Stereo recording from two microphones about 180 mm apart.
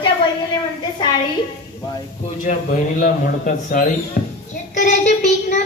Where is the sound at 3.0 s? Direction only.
50° left (ahead or behind).